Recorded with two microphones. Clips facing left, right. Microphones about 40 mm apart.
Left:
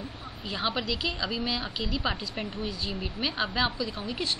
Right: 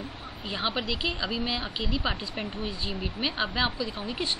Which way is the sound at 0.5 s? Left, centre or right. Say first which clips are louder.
Even; right.